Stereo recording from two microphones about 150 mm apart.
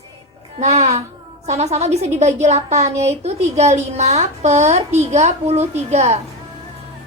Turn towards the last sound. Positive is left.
turn(degrees=-45)  # may be behind; listen again after turning